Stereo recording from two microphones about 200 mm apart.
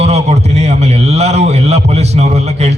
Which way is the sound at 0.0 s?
35° right (ahead or behind).